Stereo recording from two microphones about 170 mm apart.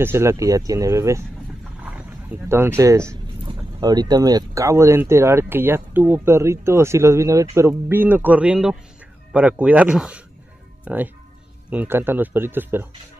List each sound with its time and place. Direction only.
0.0 s speech: 15° right (ahead or behind)